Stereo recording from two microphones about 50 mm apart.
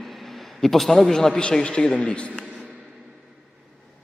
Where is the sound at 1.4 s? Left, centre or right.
Centre.